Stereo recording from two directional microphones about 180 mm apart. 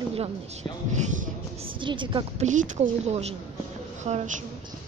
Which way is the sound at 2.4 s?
45° right (ahead or behind).